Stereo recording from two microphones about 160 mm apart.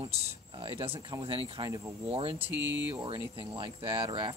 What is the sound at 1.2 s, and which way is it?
Speech, 35° right (ahead or behind).